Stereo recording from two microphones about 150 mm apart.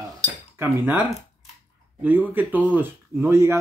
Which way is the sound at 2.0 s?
10° right (ahead or behind).